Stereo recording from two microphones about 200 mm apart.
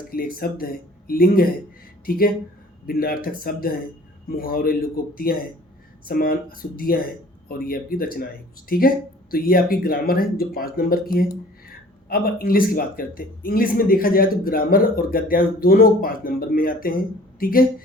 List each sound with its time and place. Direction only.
0.1 s speech: 50° left (ahead or behind)
9.3 s speech: 45° left (ahead or behind)